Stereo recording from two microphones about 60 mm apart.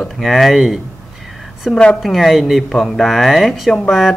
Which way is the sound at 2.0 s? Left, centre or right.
Centre.